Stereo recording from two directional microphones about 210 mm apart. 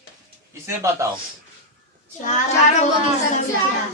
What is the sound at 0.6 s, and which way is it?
Speech, 15° right (ahead or behind).